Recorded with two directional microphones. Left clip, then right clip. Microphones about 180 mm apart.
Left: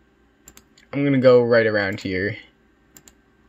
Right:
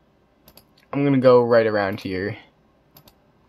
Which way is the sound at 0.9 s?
5° right (ahead or behind).